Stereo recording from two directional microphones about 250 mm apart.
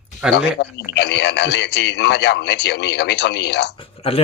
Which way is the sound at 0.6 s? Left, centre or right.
Left.